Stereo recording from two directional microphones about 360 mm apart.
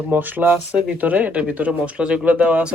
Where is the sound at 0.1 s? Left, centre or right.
Centre.